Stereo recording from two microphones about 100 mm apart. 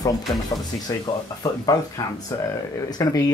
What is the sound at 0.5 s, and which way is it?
Speech, 50° left (ahead or behind).